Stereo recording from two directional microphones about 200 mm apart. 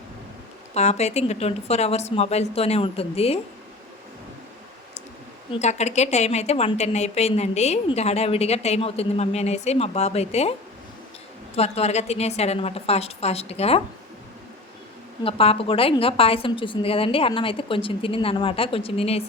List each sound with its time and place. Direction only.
0.7 s a woman's voice: 35° left (ahead or behind)
5.5 s a woman's voice: 35° left (ahead or behind)
11.5 s a woman's voice: 30° left (ahead or behind)
15.2 s a woman's voice: 30° left (ahead or behind)